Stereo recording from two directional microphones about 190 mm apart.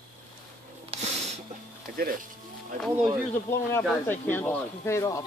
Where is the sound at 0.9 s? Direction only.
30° right (ahead or behind).